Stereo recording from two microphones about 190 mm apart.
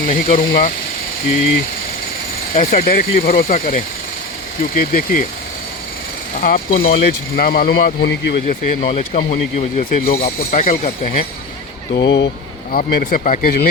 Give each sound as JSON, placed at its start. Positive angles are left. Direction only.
{"t": 0.0, "sound": "speech", "side_deg": 45}
{"t": 2.6, "sound": "speech", "side_deg": 50}
{"t": 6.4, "sound": "speech", "side_deg": 50}
{"t": 8.4, "sound": "speech", "side_deg": 40}
{"t": 12.0, "sound": "speech", "side_deg": 65}
{"t": 12.7, "sound": "speech", "side_deg": 50}